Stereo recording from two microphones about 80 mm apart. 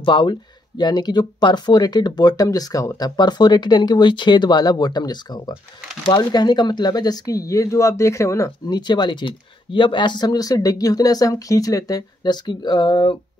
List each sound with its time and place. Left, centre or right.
0.0 s speech: left
3.0 s speech: left
8.6 s speech: left
12.2 s speech: left